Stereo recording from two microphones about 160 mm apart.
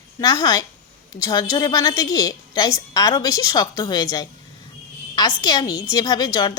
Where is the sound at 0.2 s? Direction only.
25° left (ahead or behind).